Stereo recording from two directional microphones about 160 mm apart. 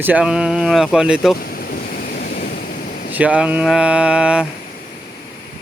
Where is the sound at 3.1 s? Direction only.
10° right (ahead or behind).